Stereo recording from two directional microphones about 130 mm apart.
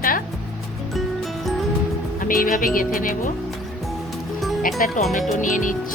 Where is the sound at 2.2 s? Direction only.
90° left.